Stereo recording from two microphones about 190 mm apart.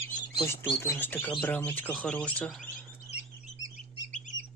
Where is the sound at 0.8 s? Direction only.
10° left (ahead or behind).